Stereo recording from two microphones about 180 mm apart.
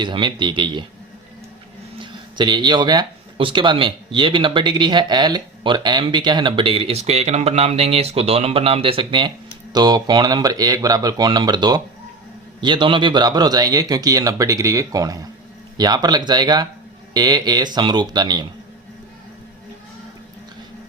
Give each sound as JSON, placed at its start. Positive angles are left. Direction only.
{"t": 0.0, "sound": "speech", "side_deg": -25}
{"t": 2.0, "sound": "speech", "side_deg": -25}